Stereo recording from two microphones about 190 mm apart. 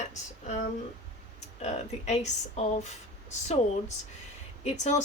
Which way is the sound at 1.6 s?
35° left (ahead or behind).